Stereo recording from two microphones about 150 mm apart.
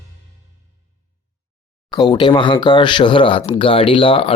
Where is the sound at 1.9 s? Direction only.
30° left (ahead or behind).